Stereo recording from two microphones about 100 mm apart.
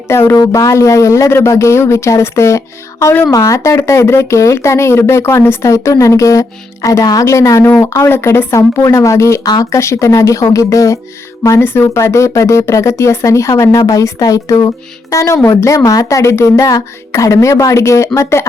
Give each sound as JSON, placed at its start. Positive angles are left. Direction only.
{"t": 0.1, "sound": "speech", "side_deg": 25}
{"t": 3.3, "sound": "speech", "side_deg": 35}